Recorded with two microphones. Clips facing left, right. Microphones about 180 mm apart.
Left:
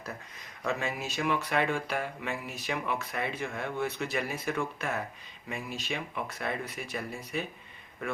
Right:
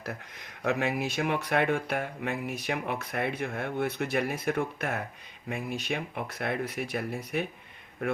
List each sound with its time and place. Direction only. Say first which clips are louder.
0.1 s speech: right 3 dB; 65° right (ahead or behind)